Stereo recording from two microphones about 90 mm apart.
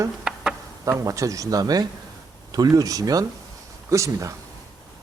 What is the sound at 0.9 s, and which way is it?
Speech, 35° right (ahead or behind).